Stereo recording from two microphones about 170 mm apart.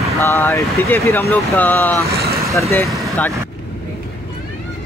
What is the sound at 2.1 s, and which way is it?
Vehicle, 70° right (ahead or behind).